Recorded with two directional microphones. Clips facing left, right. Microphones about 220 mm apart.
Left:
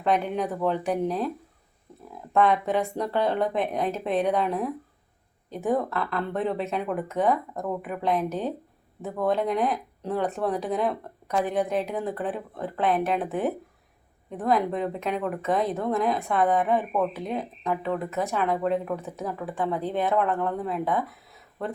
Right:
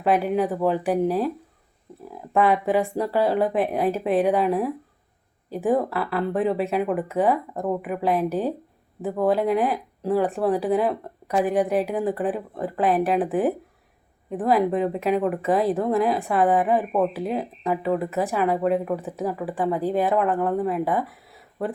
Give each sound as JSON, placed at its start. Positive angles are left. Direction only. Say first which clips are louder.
{"t": 0.0, "sound": "speech", "louder": "right 4 dB", "side_deg": -5}
{"t": 2.3, "sound": "speech", "louder": "right 2 dB", "side_deg": -5}
{"t": 9.0, "sound": "speech", "louder": "right 6 dB", "side_deg": -30}
{"t": 9.2, "sound": "speech", "louder": "right 3 dB", "side_deg": -5}
{"t": 14.3, "sound": "speech", "louder": "right 4 dB", "side_deg": -5}